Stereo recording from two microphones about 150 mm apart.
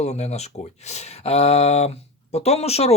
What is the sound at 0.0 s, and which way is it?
Speech, 50° left (ahead or behind).